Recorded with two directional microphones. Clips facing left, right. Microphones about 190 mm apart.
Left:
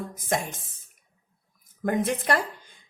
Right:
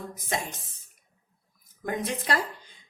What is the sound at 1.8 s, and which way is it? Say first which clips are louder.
Speech: left 5 dB; 55° left (ahead or behind).